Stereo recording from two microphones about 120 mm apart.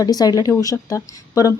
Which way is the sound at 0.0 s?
30° left (ahead or behind).